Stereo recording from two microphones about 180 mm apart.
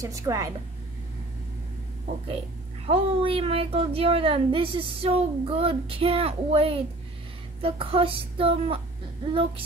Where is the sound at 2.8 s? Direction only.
30° right (ahead or behind).